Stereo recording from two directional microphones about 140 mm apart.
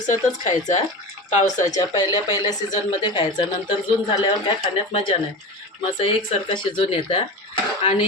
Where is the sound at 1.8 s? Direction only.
25° left (ahead or behind).